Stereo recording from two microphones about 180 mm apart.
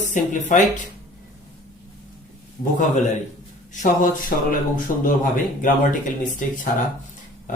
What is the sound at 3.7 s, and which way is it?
Speech, 45° left (ahead or behind).